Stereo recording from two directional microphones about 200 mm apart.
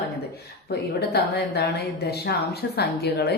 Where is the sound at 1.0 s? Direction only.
50° left (ahead or behind).